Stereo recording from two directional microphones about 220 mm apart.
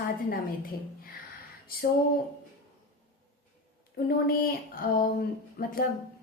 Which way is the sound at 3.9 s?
40° left (ahead or behind).